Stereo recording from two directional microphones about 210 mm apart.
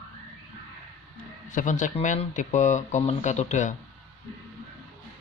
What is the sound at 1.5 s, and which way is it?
A man's voice, 35° left (ahead or behind).